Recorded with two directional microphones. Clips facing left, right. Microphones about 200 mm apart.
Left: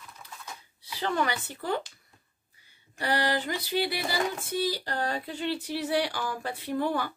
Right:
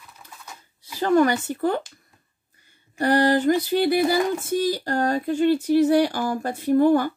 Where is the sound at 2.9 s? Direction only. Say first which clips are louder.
Right 9 dB; 50° right (ahead or behind).